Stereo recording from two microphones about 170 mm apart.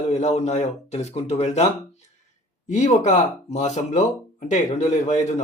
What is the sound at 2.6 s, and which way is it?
Speech, 45° left (ahead or behind).